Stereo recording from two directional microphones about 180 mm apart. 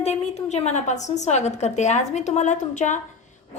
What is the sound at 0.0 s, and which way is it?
A woman's voice, 35° left (ahead or behind).